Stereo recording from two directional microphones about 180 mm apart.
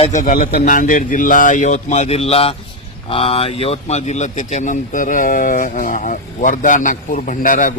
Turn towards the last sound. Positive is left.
turn(degrees=45)  # may be behind; listen again after turning